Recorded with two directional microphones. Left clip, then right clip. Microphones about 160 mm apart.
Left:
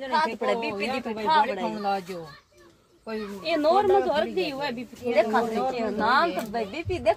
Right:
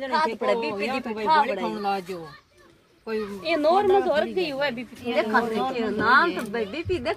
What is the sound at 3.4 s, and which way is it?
A woman's voice, centre (ahead or behind).